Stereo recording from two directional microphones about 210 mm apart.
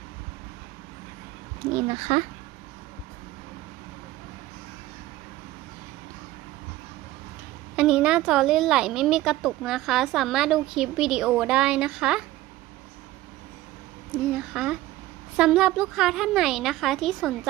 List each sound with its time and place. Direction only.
1.7 s speech: 20° right (ahead or behind)
7.8 s speech: 5° right (ahead or behind)
14.3 s speech: 5° right (ahead or behind)